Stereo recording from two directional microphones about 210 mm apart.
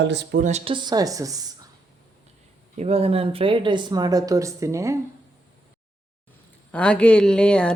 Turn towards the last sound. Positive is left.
turn(degrees=5)  # may be behind; listen again after turning